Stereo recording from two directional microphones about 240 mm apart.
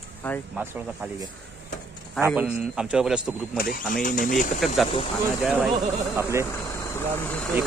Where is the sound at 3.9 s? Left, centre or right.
Left.